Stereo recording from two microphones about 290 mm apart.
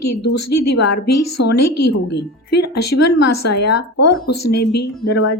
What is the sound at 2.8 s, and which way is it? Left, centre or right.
Speech, left.